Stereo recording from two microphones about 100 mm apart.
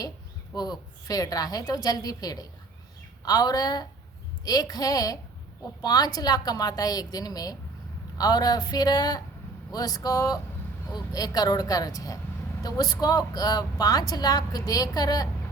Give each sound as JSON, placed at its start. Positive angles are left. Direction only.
{"t": 0.5, "sound": "a woman's voice", "side_deg": 40}